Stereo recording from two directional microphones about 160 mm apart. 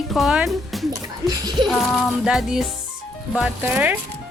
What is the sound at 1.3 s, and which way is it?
Speech, 25° right (ahead or behind).